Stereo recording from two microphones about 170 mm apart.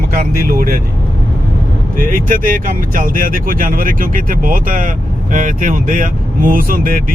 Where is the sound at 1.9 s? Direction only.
55° right (ahead or behind).